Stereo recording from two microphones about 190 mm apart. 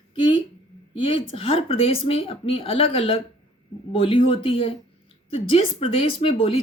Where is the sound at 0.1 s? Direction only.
25° left (ahead or behind).